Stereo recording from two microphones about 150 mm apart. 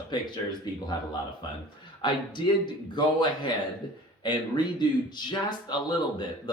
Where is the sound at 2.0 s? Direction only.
30° left (ahead or behind).